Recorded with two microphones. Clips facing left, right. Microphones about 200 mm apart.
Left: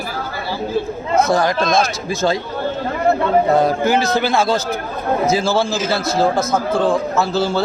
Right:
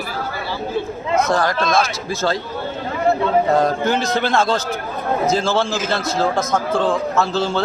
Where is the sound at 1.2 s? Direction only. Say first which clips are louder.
Left 2 dB; 10° left (ahead or behind).